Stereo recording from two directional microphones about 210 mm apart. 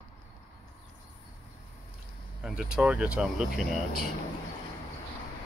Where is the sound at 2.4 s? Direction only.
5° right (ahead or behind).